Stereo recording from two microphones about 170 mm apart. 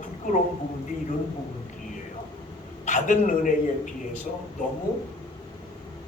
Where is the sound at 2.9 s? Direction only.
50° left (ahead or behind).